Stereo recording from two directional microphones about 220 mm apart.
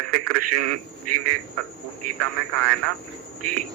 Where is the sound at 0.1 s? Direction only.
90° right.